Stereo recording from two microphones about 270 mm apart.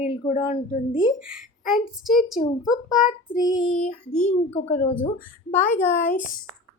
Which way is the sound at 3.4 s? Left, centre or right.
Centre.